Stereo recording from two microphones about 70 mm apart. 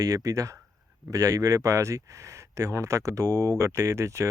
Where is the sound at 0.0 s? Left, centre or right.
Right.